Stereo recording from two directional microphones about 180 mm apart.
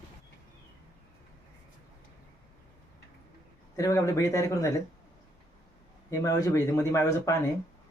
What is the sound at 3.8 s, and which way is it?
Speech, 15° left (ahead or behind).